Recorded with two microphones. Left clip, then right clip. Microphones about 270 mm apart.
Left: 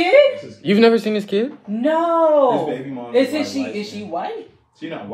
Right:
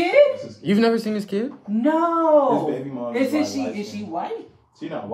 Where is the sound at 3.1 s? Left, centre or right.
Centre.